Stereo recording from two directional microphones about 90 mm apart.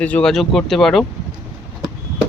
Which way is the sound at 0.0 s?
15° left (ahead or behind).